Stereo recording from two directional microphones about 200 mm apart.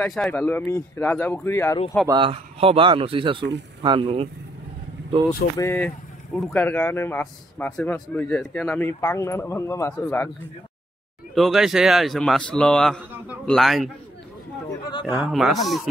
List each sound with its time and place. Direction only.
0.0 s speech: 5° left (ahead or behind)
2.0 s a man's voice: 25° right (ahead or behind)
5.6 s speech: 10° left (ahead or behind)
11.3 s a man's voice: centre (ahead or behind)
14.9 s a man's voice: 25° left (ahead or behind)
15.1 s a man's voice: centre (ahead or behind)